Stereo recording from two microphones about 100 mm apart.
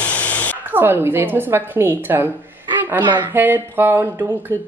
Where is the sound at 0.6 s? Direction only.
20° right (ahead or behind).